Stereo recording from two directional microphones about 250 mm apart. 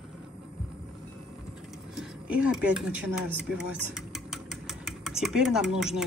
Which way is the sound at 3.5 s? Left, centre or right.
Centre.